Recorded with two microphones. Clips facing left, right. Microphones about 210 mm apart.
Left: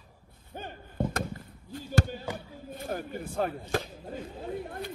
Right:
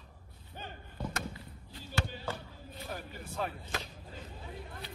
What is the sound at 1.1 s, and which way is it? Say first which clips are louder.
Basketball bounce: left 6 dB; 50° left (ahead or behind).